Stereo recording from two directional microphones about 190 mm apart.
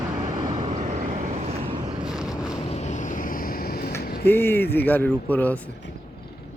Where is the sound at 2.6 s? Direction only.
35° left (ahead or behind); by 3.9 s 55° left (ahead or behind).